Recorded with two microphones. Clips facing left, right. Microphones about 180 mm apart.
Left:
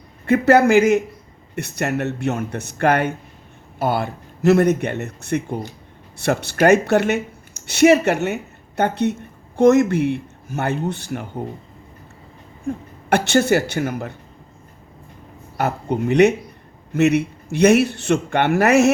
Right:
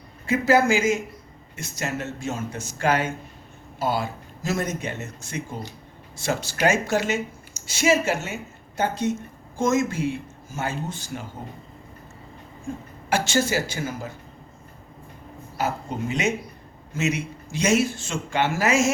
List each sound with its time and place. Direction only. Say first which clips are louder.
0.3 s a man's voice: left 6 dB; 65° left (ahead or behind)
12.6 s a man's voice: left 7 dB; 60° left (ahead or behind)
15.5 s a man's voice: left 6 dB; 60° left (ahead or behind)